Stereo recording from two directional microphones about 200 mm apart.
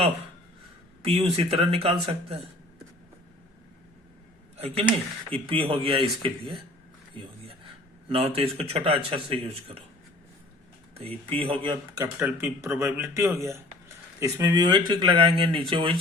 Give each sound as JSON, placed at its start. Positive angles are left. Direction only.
{"t": 1.0, "sound": "speech", "side_deg": -30}
{"t": 4.5, "sound": "speech", "side_deg": -30}
{"t": 10.9, "sound": "speech", "side_deg": -30}
{"t": 12.2, "sound": "speech", "side_deg": -10}